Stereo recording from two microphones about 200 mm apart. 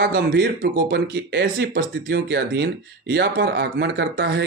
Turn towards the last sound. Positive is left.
turn(degrees=-60)  # may be behind; listen again after turning